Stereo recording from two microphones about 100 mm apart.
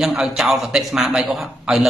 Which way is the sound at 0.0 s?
5° right (ahead or behind).